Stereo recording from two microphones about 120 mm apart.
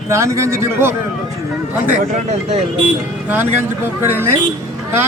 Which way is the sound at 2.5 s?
60° right (ahead or behind).